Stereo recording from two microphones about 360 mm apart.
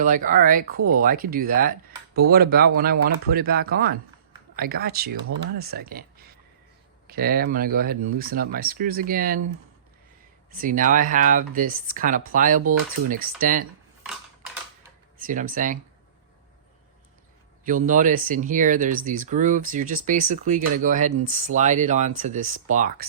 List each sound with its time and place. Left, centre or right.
0.0 s speech: right
7.1 s speech: right
10.5 s speech: right
15.3 s speech: right
17.7 s speech: right